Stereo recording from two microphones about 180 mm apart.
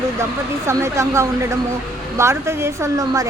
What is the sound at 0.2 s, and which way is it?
Speech, 15° right (ahead or behind).